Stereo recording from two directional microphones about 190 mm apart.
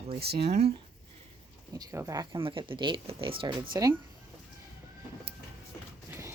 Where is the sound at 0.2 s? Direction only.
55° right (ahead or behind).